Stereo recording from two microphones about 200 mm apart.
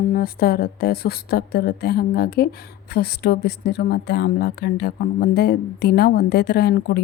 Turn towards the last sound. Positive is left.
turn(degrees=55)  # may be behind; listen again after turning